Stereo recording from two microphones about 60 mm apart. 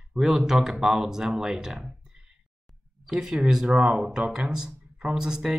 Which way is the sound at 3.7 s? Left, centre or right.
Centre.